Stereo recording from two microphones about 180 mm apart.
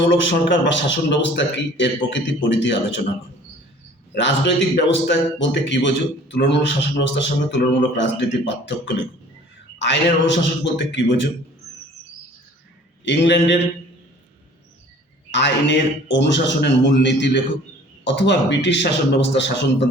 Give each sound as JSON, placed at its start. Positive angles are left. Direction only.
{"t": 0.0, "sound": "a man's voice", "side_deg": 90}
{"t": 4.1, "sound": "a man's voice", "side_deg": 70}
{"t": 9.7, "sound": "a man's voice", "side_deg": 85}
{"t": 13.1, "sound": "a man's voice", "side_deg": 80}
{"t": 15.3, "sound": "a man's voice", "side_deg": 80}